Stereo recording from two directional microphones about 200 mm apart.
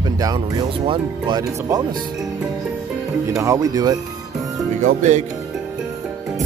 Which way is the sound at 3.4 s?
15° right (ahead or behind).